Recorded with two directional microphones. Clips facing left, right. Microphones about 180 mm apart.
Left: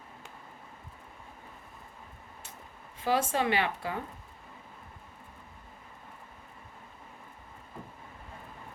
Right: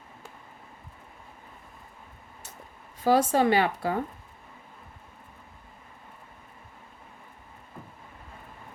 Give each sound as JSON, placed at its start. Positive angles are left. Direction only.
{"t": 3.0, "sound": "speech", "side_deg": -40}